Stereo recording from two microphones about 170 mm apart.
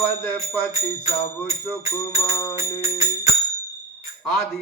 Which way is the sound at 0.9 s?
15° left (ahead or behind).